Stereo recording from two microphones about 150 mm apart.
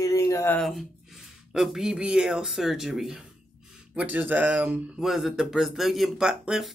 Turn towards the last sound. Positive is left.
turn(degrees=-5)  # may be behind; listen again after turning